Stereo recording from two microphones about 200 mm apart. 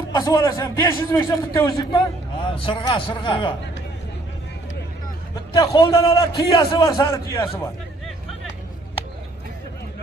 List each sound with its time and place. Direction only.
0.1 s a man's voice: 15° left (ahead or behind)
5.3 s a man's voice: 15° left (ahead or behind)